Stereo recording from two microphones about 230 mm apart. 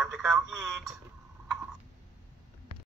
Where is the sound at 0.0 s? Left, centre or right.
Centre.